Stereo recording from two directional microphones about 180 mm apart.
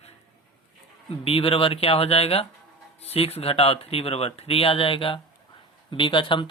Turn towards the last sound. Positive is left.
turn(degrees=25)  # may be behind; listen again after turning